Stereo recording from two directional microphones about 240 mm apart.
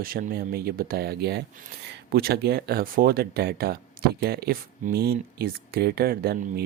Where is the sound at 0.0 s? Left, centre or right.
Right.